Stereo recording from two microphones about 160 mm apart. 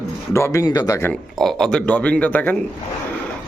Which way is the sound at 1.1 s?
Centre (ahead or behind).